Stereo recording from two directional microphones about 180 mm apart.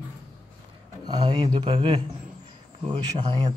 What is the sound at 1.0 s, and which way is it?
Speech, 25° right (ahead or behind).